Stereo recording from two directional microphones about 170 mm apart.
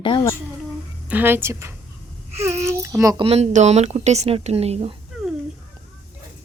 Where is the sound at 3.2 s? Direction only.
40° right (ahead or behind).